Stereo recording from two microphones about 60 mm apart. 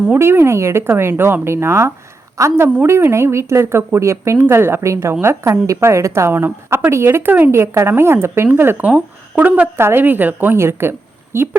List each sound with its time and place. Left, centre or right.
0.2 s speech: right
2.4 s speech: right
2.8 s speech: right
7.3 s a woman's voice: right
7.5 s a woman's voice: right
9.4 s a woman's voice: right
9.7 s a woman's voice: right